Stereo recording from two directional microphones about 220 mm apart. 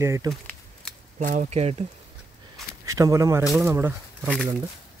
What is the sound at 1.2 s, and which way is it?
Speech, 35° right (ahead or behind).